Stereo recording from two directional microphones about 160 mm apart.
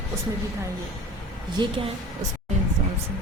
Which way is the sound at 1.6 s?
35° right (ahead or behind).